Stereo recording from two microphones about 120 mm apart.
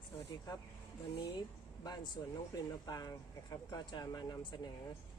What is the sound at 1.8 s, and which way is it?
Speech, 35° left (ahead or behind).